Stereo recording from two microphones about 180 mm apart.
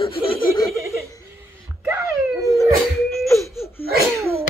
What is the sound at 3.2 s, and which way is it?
Crying, 15° left (ahead or behind).